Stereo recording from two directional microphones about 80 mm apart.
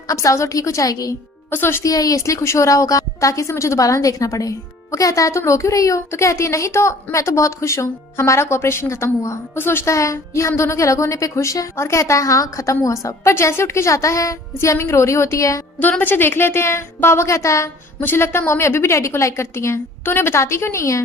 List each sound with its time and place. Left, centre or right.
0.1 s a woman's voice: left
1.5 s speech: left
1.8 s a woman's voice: left
15.8 s a woman's voice: left
18.0 s a woman's voice: left